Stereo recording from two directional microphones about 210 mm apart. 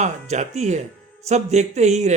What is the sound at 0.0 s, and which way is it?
Speech, 35° right (ahead or behind).